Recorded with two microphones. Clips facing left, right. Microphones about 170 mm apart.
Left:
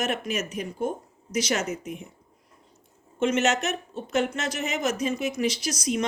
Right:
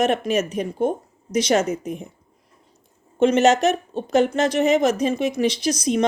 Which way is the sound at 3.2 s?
35° right (ahead or behind).